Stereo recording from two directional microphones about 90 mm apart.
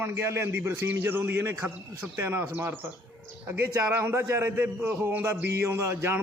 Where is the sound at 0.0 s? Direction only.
25° right (ahead or behind).